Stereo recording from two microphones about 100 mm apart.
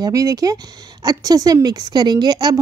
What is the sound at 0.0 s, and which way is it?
A woman's voice, 35° right (ahead or behind).